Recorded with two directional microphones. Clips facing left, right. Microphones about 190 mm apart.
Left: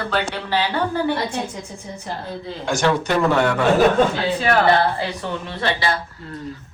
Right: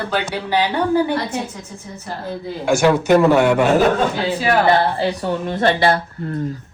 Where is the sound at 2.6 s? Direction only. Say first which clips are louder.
Right 5 dB; 10° right (ahead or behind).